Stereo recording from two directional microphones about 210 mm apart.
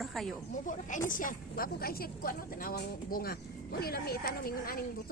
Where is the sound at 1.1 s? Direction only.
40° left (ahead or behind).